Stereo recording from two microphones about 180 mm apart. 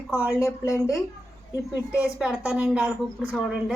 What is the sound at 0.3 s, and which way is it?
Speech, 15° left (ahead or behind).